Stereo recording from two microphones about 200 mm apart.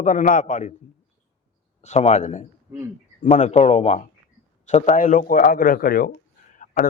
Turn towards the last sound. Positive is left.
turn(degrees=45)  # may be behind; listen again after turning